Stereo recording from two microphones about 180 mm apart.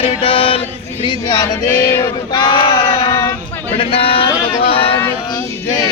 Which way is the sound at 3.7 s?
30° left (ahead or behind).